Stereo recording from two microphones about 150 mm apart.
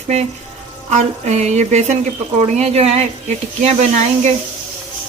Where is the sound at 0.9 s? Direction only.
50° right (ahead or behind).